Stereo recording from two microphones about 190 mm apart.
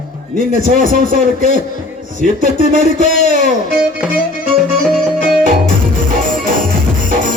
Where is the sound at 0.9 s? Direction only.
45° right (ahead or behind).